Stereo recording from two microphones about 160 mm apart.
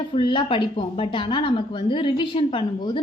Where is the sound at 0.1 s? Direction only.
35° left (ahead or behind).